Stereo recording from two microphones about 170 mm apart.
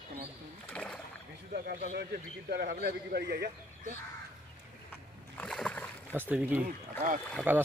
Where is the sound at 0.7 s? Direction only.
5° left (ahead or behind).